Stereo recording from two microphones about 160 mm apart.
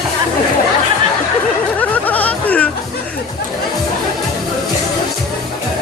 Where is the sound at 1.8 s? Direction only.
10° left (ahead or behind).